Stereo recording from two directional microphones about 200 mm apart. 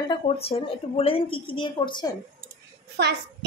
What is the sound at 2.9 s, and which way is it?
Speech, 55° right (ahead or behind).